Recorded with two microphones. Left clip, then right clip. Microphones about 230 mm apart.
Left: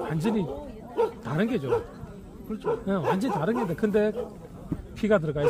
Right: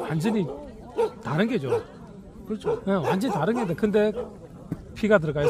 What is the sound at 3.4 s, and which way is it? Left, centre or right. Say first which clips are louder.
A man's voice: right 2 dB; right.